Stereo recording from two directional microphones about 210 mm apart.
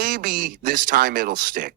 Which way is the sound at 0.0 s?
40° right (ahead or behind).